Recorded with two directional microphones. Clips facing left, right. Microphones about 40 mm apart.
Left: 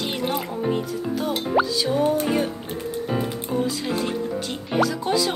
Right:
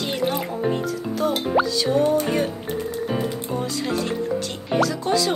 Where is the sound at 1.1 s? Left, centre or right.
Centre.